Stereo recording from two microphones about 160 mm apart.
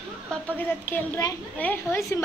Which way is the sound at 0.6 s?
10° left (ahead or behind).